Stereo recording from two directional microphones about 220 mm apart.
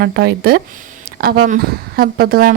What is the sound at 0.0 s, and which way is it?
Speech, 45° right (ahead or behind).